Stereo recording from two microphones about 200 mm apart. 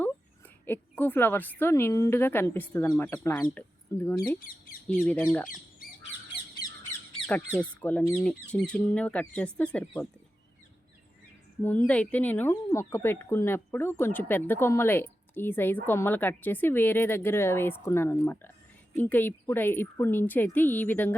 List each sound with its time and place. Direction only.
0.6 s speech: 10° left (ahead or behind)
4.4 s speech: 45° left (ahead or behind)
5.0 s speech: 5° left (ahead or behind)
7.3 s speech: 10° left (ahead or behind)
11.6 s speech: 10° left (ahead or behind)